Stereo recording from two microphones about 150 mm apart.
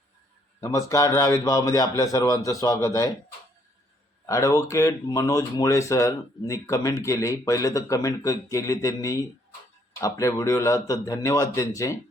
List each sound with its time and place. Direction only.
0.6 s speech: 20° left (ahead or behind)
4.3 s speech: 20° left (ahead or behind)